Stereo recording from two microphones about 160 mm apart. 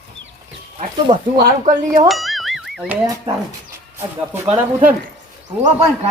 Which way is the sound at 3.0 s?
20° right (ahead or behind).